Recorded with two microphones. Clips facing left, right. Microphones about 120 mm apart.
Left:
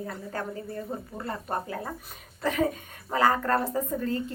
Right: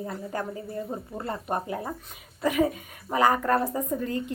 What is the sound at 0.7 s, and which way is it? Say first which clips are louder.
Speech: right 2 dB; 25° right (ahead or behind).